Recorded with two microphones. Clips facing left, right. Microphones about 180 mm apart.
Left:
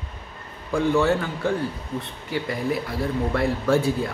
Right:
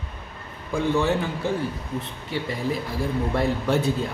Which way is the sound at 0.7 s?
15° right (ahead or behind).